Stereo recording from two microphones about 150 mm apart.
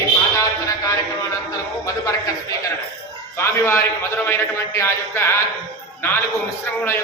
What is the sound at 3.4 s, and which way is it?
A man's voice, 15° left (ahead or behind).